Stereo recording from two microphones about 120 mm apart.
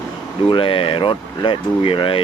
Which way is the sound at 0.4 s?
45° left (ahead or behind).